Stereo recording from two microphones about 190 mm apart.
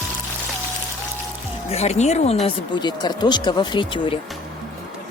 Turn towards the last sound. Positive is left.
turn(degrees=25)  # may be behind; listen again after turning